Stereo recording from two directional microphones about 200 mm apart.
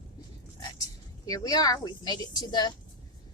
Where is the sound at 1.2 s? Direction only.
20° left (ahead or behind).